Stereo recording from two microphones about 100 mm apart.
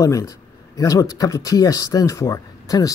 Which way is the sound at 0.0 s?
35° left (ahead or behind).